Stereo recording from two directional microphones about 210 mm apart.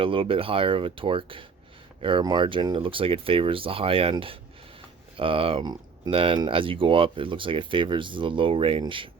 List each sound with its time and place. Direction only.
0.0 s speech: 25° right (ahead or behind)